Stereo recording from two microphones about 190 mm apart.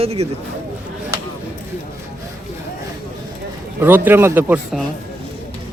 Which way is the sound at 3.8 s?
10° right (ahead or behind).